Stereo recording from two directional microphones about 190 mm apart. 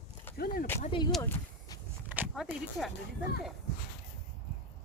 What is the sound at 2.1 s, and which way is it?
Speech, 10° right (ahead or behind).